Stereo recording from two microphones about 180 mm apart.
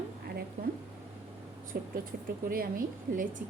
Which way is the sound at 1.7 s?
60° right (ahead or behind).